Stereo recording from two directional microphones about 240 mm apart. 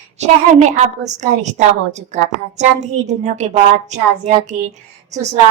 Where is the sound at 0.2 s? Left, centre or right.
Right.